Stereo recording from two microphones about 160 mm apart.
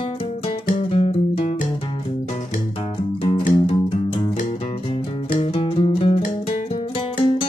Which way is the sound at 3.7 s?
40° left (ahead or behind).